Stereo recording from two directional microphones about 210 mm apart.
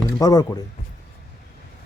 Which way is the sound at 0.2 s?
15° left (ahead or behind).